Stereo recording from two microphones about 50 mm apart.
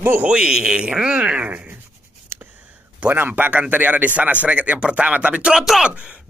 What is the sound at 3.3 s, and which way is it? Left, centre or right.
A man's voice, right.